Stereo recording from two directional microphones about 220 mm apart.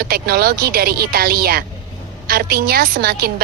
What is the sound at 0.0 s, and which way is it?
A woman's voice, 45° right (ahead or behind).